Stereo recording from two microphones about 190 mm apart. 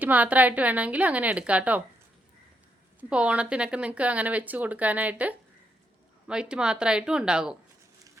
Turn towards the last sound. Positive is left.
turn(degrees=-5)  # may be behind; listen again after turning